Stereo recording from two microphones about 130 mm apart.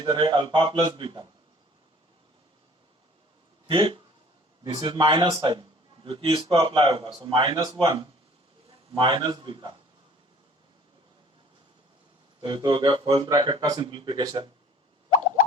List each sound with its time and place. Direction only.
0.0 s speech: 40° right (ahead or behind)
3.7 s a man's voice: 40° right (ahead or behind)
9.0 s speech: 35° right (ahead or behind)
12.4 s speech: 40° right (ahead or behind)